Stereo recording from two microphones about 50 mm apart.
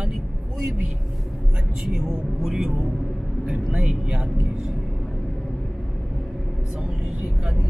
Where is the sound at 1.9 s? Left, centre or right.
Centre.